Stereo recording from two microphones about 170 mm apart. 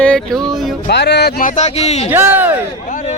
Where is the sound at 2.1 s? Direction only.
10° right (ahead or behind).